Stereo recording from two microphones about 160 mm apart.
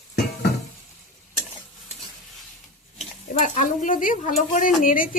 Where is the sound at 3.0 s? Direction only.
50° left (ahead or behind).